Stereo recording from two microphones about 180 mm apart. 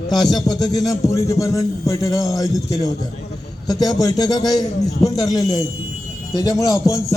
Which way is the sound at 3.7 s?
20° left (ahead or behind).